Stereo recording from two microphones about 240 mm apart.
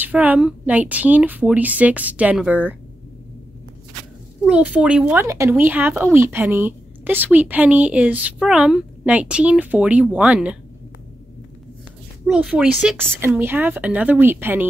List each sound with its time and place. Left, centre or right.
0.0 s a woman's voice: centre
4.5 s speech: centre
12.3 s a woman's voice: centre